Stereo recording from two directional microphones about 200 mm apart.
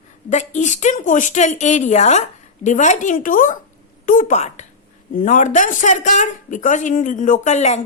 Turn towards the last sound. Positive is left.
turn(degrees=35)  # may be behind; listen again after turning